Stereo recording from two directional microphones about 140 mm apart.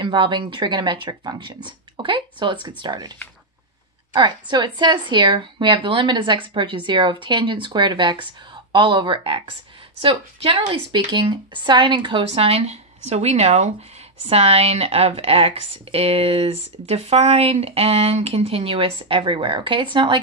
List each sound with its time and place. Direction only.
0.0 s speech: 35° right (ahead or behind)